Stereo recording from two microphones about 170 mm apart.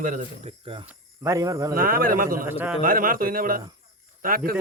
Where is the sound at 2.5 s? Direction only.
10° right (ahead or behind).